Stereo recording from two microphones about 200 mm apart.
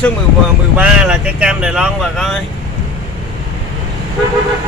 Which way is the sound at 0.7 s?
5° right (ahead or behind).